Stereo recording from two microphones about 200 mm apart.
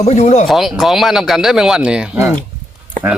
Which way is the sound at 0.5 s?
Centre (ahead or behind).